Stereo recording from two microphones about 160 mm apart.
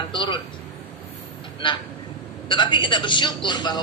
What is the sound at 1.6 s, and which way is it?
A woman's voice, 30° left (ahead or behind).